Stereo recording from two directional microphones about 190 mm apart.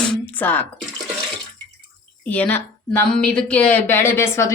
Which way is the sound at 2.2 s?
10° left (ahead or behind).